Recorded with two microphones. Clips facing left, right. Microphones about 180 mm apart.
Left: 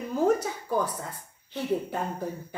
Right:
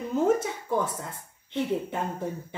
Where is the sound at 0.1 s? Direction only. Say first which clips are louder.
Even; 25° right (ahead or behind).